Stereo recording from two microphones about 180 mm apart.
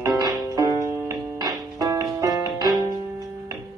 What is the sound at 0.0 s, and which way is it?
Music, 20° right (ahead or behind).